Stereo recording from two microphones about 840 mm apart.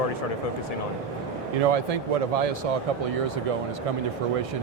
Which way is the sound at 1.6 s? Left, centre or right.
Right.